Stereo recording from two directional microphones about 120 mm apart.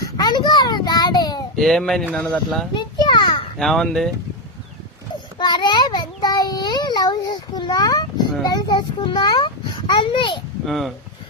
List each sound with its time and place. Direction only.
0.0 s a sound: 35° left (ahead or behind)
1.5 s speech: 5° left (ahead or behind)
2.7 s a sound: 35° left (ahead or behind)
3.6 s speech: centre (ahead or behind)
5.4 s a child's voice: 35° left (ahead or behind)
10.7 s speech: centre (ahead or behind)